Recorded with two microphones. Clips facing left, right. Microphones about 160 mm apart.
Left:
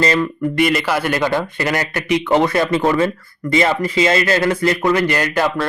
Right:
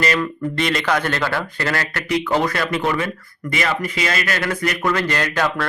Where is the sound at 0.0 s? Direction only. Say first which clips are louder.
Left 4 dB; 25° left (ahead or behind).